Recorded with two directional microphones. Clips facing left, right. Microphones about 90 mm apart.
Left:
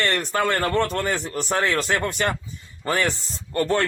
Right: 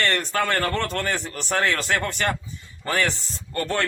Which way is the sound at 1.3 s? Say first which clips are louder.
Left 2 dB; 30° left (ahead or behind).